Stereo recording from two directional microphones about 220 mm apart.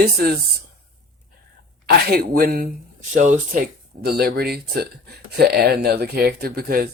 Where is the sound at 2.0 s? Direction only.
45° right (ahead or behind).